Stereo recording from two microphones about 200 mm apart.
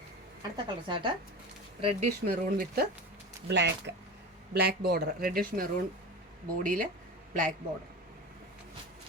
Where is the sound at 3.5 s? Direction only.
60° right (ahead or behind).